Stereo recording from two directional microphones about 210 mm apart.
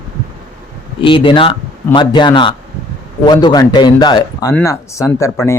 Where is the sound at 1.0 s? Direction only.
25° left (ahead or behind).